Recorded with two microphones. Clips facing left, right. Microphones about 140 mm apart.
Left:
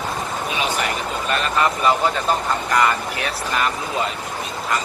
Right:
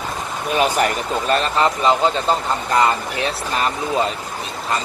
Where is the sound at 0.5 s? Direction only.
45° right (ahead or behind).